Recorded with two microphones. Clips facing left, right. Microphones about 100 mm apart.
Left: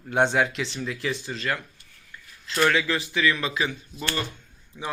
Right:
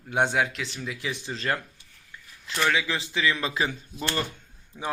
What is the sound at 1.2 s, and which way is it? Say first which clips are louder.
Speech: even; 30° right (ahead or behind).